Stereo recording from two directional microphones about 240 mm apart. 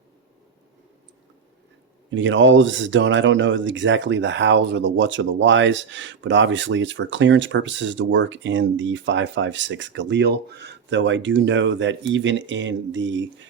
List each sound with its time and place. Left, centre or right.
2.0 s speech: right